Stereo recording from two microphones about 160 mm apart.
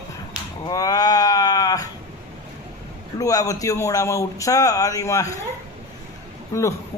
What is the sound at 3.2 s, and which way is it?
Speech, 20° left (ahead or behind).